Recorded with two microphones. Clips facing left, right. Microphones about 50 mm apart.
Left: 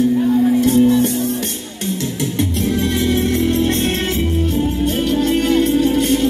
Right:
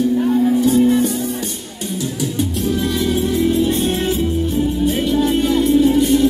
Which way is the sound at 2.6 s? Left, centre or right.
Left.